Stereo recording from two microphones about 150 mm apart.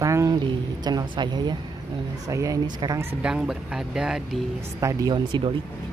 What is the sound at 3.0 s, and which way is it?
Speech, 5° right (ahead or behind).